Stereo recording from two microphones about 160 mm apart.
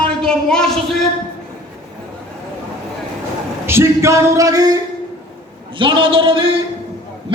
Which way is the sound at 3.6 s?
15° right (ahead or behind).